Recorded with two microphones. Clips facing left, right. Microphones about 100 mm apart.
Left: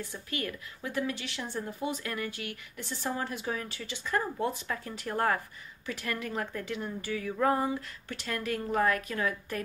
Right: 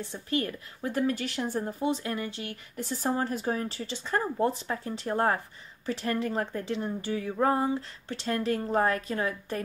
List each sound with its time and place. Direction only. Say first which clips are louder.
0.0 s a woman's voice: right 6 dB; 30° right (ahead or behind)